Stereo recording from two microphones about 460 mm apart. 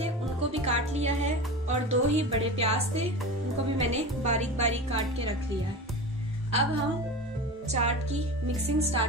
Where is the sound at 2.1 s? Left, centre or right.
Centre.